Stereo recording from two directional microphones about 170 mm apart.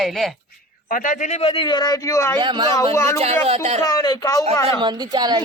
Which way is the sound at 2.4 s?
25° right (ahead or behind).